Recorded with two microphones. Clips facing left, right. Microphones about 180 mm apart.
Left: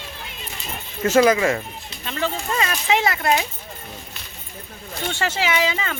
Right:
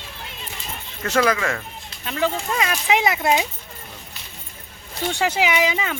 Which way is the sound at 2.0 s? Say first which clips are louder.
Right 2 dB; 5° right (ahead or behind).